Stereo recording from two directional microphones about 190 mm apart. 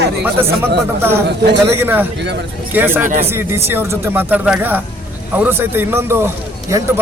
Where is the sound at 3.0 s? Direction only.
45° right (ahead or behind).